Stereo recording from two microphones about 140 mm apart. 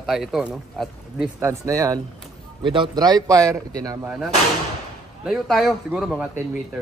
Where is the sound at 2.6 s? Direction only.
35° right (ahead or behind).